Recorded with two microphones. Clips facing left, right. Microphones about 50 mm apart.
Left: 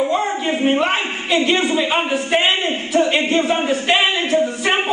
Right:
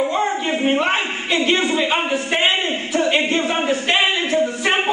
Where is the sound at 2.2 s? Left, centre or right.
Centre.